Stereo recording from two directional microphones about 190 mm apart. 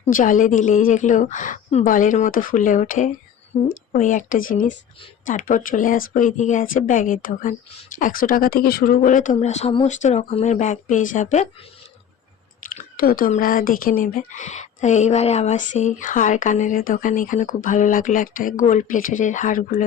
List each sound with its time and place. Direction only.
0.0 s speech: 45° left (ahead or behind)
12.7 s speech: 50° left (ahead or behind)